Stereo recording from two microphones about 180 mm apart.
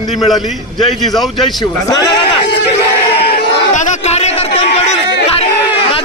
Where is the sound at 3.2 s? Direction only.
60° left (ahead or behind).